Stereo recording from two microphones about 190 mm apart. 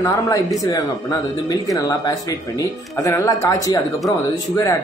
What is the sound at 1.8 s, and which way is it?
Speech, 20° left (ahead or behind).